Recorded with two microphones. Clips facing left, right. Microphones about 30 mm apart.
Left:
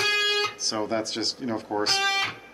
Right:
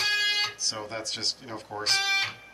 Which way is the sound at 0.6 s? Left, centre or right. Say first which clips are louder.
Left 6 dB; centre.